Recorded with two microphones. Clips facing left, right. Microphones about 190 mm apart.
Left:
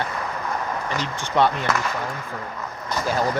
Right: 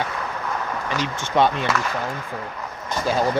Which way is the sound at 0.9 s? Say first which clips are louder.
Right 2 dB; 20° right (ahead or behind).